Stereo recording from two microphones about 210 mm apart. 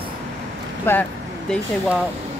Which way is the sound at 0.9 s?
10° left (ahead or behind).